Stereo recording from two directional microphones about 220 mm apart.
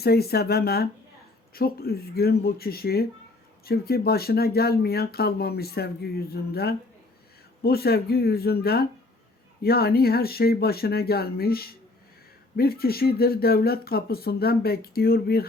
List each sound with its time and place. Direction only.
0.0 s speech: 45° left (ahead or behind)